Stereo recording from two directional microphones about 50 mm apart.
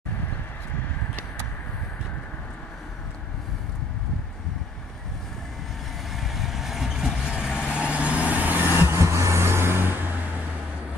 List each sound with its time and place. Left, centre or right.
6.1 s vehicle: centre; by 8.7 s right
8.8 s vehicle: right